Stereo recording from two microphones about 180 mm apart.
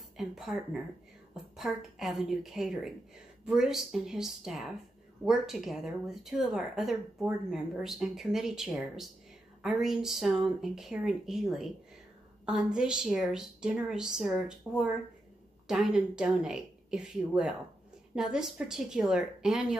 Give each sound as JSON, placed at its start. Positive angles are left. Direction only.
{"t": 0.2, "sound": "speech", "side_deg": 0}